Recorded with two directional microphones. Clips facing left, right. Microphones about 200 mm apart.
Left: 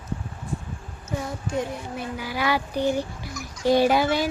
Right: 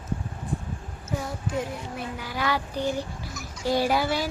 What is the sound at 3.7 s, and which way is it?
Speech, 20° left (ahead or behind).